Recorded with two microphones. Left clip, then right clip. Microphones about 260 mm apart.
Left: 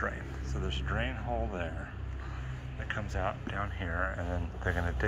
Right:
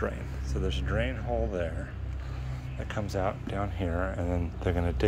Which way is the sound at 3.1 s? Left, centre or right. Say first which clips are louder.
Right 7 dB; centre.